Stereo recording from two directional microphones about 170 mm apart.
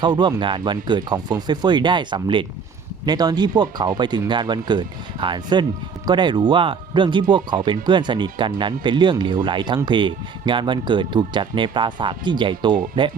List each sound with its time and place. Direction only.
0.0 s speech: 25° right (ahead or behind)